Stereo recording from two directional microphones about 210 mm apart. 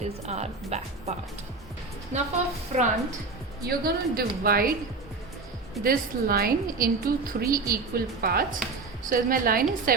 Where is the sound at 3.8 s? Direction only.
45° right (ahead or behind).